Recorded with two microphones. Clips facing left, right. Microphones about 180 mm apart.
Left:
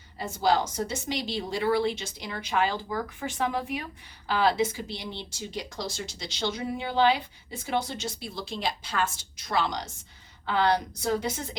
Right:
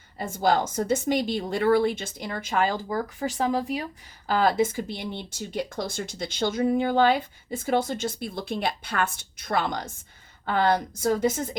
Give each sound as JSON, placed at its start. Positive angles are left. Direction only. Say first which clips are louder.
{"t": 0.2, "sound": "speech", "louder": "right 2 dB", "side_deg": -50}
{"t": 4.3, "sound": "speech", "louder": "right 2 dB", "side_deg": -45}